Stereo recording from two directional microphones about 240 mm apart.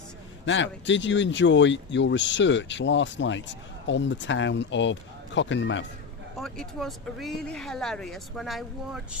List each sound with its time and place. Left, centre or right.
0.4 s speech: left
6.3 s speech: centre